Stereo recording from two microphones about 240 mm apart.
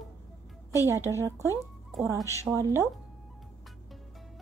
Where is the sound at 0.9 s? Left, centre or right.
Centre.